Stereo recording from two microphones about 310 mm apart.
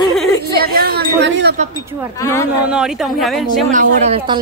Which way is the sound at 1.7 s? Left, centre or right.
Centre.